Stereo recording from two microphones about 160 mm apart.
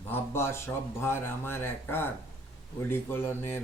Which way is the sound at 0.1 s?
15° left (ahead or behind).